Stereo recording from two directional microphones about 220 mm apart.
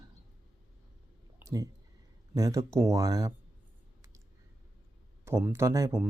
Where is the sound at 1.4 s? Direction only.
15° right (ahead or behind).